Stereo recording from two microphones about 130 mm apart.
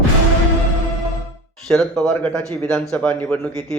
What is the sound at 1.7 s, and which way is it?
A man's voice, centre (ahead or behind).